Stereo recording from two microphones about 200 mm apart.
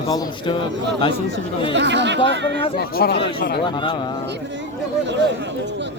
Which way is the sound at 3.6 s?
25° left (ahead or behind).